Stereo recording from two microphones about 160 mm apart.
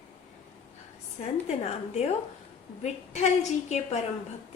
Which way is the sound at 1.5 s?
40° left (ahead or behind).